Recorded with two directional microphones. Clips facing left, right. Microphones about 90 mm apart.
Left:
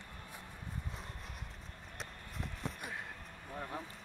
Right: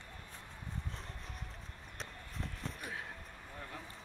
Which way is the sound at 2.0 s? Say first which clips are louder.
Even; 5° left (ahead or behind).